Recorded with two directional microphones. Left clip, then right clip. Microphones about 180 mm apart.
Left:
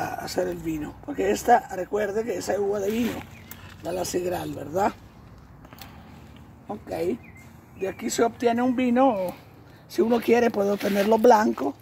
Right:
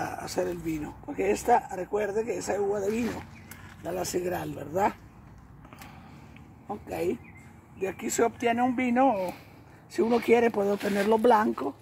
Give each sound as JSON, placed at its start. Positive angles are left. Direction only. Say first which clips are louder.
{"t": 0.0, "sound": "a sound", "louder": "left 3 dB", "side_deg": 30}
{"t": 0.7, "sound": "a man's voice", "louder": "left 3 dB", "side_deg": 35}
{"t": 6.7, "sound": "a man's voice", "louder": "left 3 dB", "side_deg": 30}